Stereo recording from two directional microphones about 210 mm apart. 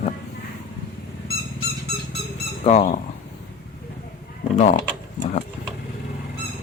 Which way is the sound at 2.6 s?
30° left (ahead or behind).